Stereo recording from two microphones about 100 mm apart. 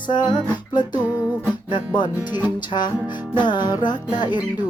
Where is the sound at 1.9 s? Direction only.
50° left (ahead or behind).